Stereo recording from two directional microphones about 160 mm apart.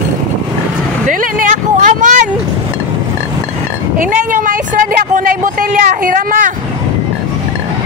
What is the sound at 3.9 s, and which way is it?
Speech, 55° right (ahead or behind).